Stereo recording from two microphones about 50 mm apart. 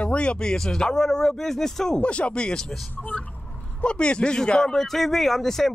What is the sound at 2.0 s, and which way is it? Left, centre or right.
Speech, left.